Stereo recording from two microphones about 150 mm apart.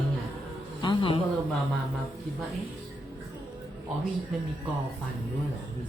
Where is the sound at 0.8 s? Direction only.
35° left (ahead or behind).